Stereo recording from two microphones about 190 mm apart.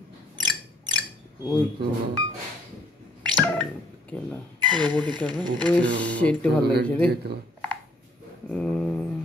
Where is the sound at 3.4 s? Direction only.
5° left (ahead or behind).